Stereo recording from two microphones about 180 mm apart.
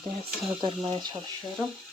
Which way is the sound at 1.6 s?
15° right (ahead or behind).